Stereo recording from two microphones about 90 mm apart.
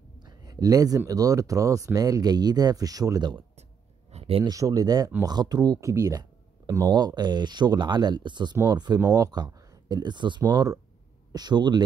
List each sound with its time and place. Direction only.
0.2 s speech: 45° right (ahead or behind)
4.2 s a sound: 90° right
4.5 s speech: 40° right (ahead or behind)
6.9 s speech: 50° right (ahead or behind)